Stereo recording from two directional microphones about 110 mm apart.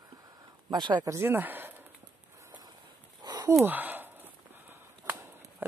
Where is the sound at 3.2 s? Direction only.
40° right (ahead or behind).